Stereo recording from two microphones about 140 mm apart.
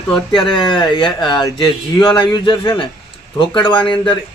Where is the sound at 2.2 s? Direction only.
35° left (ahead or behind).